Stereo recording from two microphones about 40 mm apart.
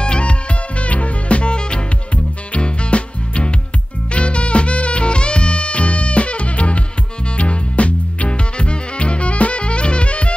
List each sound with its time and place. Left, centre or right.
0.0 s music: left